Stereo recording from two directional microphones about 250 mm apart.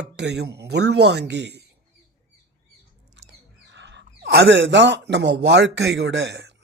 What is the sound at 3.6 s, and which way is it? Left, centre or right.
Speech, right.